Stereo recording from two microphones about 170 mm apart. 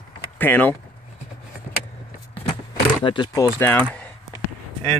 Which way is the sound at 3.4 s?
15° left (ahead or behind).